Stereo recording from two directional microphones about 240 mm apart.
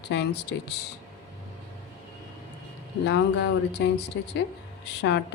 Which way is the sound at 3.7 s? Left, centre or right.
Left.